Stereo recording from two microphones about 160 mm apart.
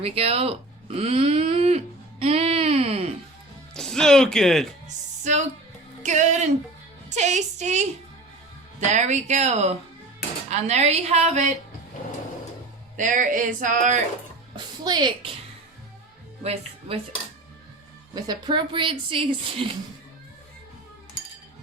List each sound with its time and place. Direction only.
0.0 s speech: 40° right (ahead or behind)
3.8 s speech: 5° left (ahead or behind)
5.2 s a woman's voice: 45° right (ahead or behind)
8.9 s a woman's voice: 45° right (ahead or behind)
13.0 s speech: 55° right (ahead or behind)
14.5 s a woman's voice: 25° right (ahead or behind)
16.4 s a woman's voice: 40° right (ahead or behind)
18.1 s a woman's voice: 25° right (ahead or behind)